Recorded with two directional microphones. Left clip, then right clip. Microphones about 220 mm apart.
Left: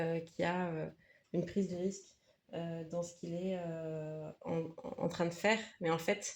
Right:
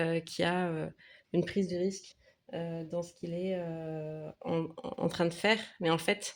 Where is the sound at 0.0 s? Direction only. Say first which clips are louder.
Right 5 dB; 35° right (ahead or behind).